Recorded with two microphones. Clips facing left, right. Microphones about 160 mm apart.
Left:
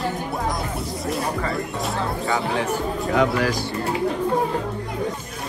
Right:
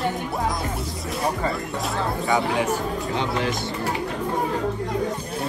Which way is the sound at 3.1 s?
25° right (ahead or behind).